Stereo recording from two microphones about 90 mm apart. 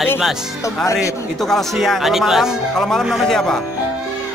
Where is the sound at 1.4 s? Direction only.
5° left (ahead or behind).